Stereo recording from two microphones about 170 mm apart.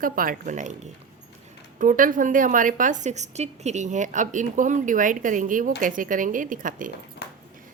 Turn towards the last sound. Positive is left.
turn(degrees=85)